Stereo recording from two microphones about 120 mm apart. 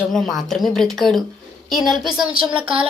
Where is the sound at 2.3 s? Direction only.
45° right (ahead or behind).